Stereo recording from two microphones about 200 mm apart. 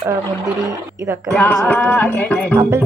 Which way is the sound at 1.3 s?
10° left (ahead or behind).